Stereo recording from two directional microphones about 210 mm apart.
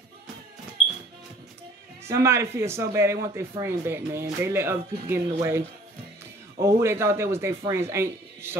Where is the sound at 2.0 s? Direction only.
10° right (ahead or behind).